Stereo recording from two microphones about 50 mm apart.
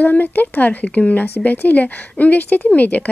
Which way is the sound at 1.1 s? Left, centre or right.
Left.